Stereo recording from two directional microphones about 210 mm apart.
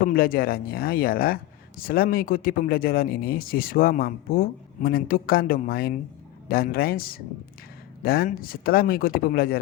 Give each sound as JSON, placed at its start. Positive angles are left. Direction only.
{"t": 0.1, "sound": "speech", "side_deg": 45}